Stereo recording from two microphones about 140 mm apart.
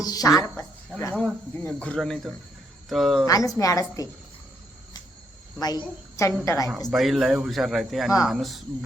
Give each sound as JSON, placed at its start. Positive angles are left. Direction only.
{"t": 0.0, "sound": "speech", "side_deg": 25}
{"t": 1.1, "sound": "speech", "side_deg": 5}
{"t": 3.2, "sound": "a woman's voice", "side_deg": 25}
{"t": 5.5, "sound": "a woman's voice", "side_deg": 30}
{"t": 6.9, "sound": "speech", "side_deg": 0}